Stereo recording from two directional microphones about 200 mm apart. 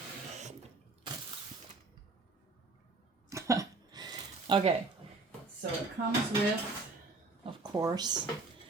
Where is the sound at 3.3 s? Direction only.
15° right (ahead or behind).